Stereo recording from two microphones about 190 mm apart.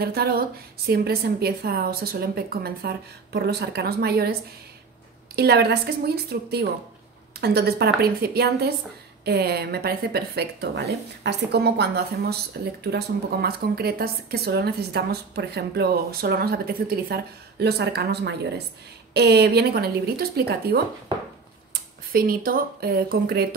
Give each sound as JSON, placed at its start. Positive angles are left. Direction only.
{"t": 0.0, "sound": "speech", "side_deg": -55}
{"t": 22.1, "sound": "speech", "side_deg": -50}